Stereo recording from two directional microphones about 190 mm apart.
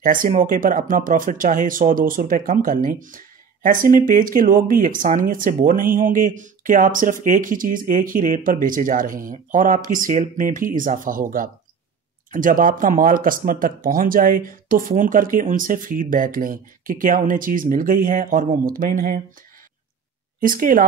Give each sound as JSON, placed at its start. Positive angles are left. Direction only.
{"t": 0.0, "sound": "speech", "side_deg": -45}
{"t": 20.3, "sound": "speech", "side_deg": -45}